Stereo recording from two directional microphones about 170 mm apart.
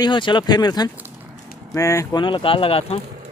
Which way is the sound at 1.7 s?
15° left (ahead or behind).